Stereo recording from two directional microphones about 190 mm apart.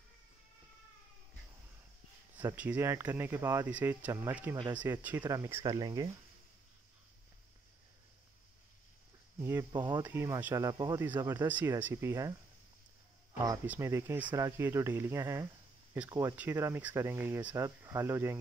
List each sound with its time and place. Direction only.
2.5 s speech: 10° right (ahead or behind)
9.4 s speech: 15° right (ahead or behind)
13.4 s speech: 15° right (ahead or behind)